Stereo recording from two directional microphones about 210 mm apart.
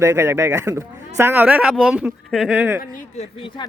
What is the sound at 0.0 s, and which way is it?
Speech, 15° right (ahead or behind).